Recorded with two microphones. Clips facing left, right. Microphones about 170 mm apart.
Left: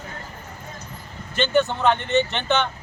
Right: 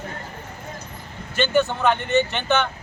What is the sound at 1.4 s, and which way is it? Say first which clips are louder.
Speech: even; 20° left (ahead or behind).